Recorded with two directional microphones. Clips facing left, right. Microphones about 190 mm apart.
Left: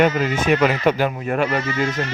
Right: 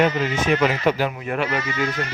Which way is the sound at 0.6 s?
50° left (ahead or behind).